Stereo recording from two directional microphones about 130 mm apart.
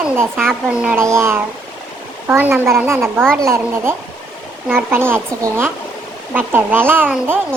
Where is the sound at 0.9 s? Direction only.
20° right (ahead or behind).